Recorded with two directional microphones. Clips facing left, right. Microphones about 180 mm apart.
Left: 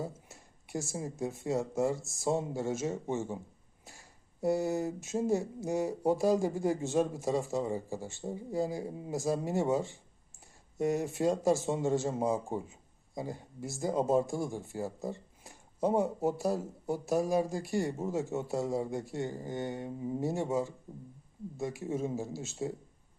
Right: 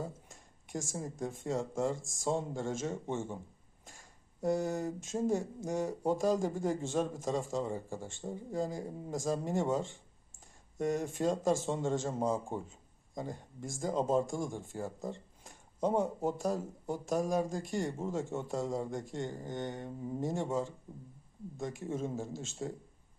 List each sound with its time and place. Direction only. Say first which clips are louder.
0.0 s speech: left 2 dB; 10° left (ahead or behind)